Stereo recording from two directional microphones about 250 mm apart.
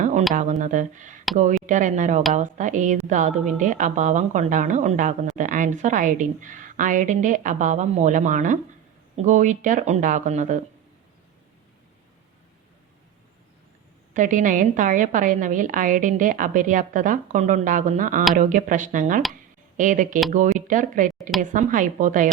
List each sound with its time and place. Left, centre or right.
0.0 s a sound: right
0.3 s a woman's voice: right
14.1 s a woman's voice: right
19.3 s a sound: right
20.3 s a woman's voice: right
21.2 s a woman's voice: centre
21.5 s a woman's voice: right